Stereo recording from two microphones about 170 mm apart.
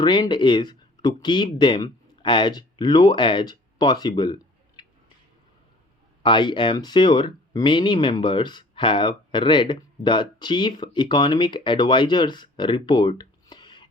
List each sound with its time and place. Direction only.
0.0 s speech: 25° left (ahead or behind)
4.8 s a sound: 25° left (ahead or behind)
6.2 s speech: 30° left (ahead or behind)